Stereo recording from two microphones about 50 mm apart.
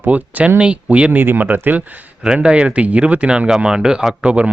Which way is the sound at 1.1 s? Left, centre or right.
Right.